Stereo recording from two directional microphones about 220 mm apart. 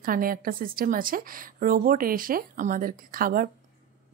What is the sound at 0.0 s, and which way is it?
Speech, 40° right (ahead or behind).